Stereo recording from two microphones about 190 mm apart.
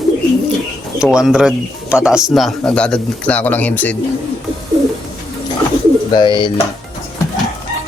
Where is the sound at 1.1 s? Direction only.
5° right (ahead or behind).